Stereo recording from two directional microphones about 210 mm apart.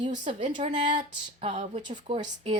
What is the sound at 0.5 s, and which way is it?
Speech, 35° right (ahead or behind).